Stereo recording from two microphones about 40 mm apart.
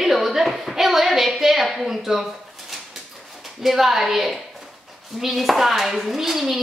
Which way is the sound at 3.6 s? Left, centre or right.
Centre.